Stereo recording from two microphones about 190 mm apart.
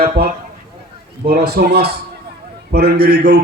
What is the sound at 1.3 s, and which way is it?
A man's voice, 50° right (ahead or behind).